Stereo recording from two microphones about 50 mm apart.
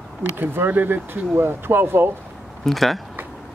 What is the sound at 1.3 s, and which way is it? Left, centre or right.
Speech, right.